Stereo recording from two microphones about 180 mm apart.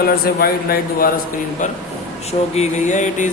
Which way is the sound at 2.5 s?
40° left (ahead or behind).